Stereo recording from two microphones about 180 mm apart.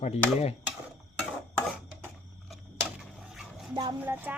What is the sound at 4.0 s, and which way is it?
Speech, 10° right (ahead or behind).